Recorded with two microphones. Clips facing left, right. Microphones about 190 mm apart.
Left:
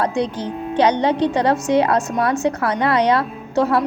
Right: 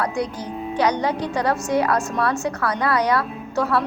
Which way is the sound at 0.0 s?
25° left (ahead or behind).